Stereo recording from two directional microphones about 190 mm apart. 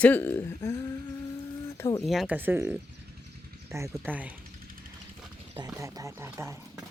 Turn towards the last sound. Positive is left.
turn(degrees=-15)  # may be behind; listen again after turning